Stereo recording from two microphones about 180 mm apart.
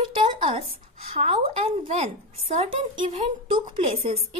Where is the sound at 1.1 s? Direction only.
35° right (ahead or behind).